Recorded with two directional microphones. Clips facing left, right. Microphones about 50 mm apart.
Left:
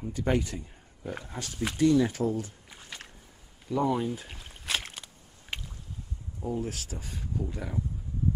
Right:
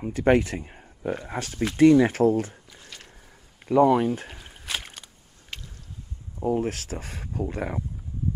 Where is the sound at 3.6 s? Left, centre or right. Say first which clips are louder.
Right 9 dB; right.